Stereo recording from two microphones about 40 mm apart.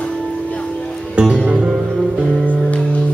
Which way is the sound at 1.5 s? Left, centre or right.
Right.